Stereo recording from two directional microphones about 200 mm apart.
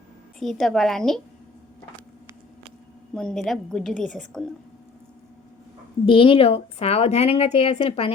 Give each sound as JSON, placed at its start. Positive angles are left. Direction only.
{"t": 0.3, "sound": "a woman's voice", "side_deg": 0}
{"t": 3.2, "sound": "a woman's voice", "side_deg": 0}
{"t": 6.1, "sound": "a woman's voice", "side_deg": 25}